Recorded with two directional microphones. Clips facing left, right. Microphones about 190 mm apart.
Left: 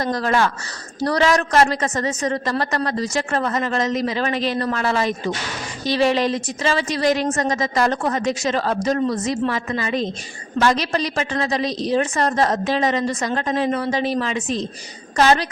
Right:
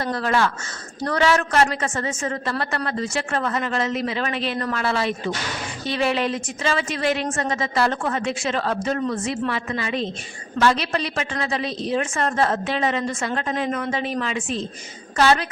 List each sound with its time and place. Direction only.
0.0 s a woman's voice: 40° left (ahead or behind)